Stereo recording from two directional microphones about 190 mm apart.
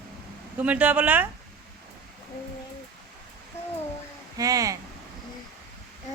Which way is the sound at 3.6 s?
10° left (ahead or behind).